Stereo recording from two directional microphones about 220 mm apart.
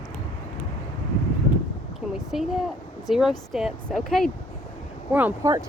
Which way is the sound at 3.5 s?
Centre (ahead or behind).